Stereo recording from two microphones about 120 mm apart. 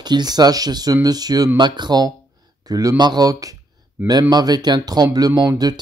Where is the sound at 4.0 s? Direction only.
15° right (ahead or behind).